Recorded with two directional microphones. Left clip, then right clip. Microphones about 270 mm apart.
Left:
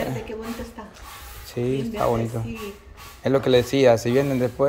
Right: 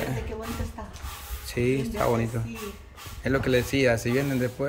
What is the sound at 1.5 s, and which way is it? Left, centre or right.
Speech, centre.